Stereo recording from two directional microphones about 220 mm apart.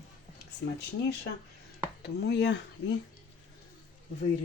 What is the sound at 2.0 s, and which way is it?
Speech, 50° left (ahead or behind).